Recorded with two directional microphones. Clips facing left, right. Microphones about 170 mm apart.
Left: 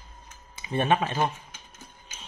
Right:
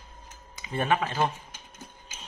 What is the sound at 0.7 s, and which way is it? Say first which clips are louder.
Speech: left 2 dB; 25° left (ahead or behind).